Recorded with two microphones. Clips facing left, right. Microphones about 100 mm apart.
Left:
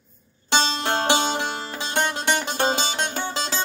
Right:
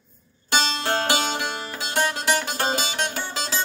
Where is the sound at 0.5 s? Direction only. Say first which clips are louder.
Left 1 dB; 30° left (ahead or behind).